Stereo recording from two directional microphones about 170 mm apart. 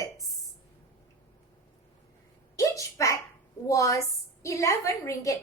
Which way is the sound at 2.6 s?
20° left (ahead or behind).